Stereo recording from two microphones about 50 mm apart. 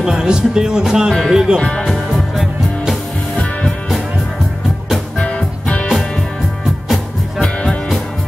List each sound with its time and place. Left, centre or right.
0.0 s speech: centre
1.6 s speech: centre
1.9 s music: centre
5.2 s music: left